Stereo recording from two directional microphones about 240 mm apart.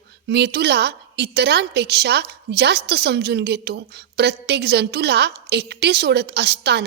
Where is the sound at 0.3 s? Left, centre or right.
Right.